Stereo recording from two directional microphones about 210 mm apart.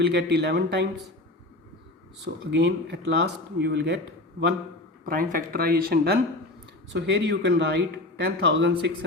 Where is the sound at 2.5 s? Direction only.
55° right (ahead or behind).